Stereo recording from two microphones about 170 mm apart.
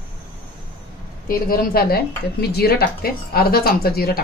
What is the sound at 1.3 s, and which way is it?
Speech, 60° left (ahead or behind).